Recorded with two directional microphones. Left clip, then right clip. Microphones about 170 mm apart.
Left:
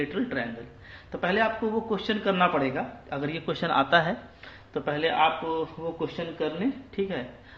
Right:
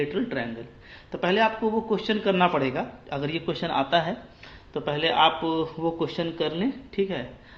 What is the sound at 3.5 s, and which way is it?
Speech, 5° right (ahead or behind).